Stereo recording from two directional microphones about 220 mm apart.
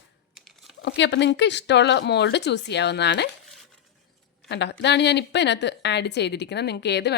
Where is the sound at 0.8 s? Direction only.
50° left (ahead or behind).